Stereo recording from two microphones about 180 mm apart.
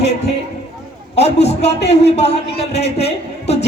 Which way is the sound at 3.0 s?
35° left (ahead or behind).